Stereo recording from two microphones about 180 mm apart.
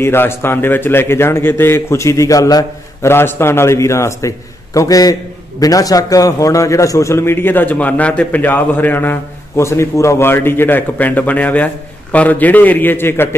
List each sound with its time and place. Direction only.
0.0 s a man's voice: 15° left (ahead or behind)